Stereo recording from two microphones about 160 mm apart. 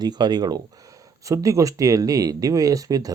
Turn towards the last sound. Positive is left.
turn(degrees=-20)  # may be behind; listen again after turning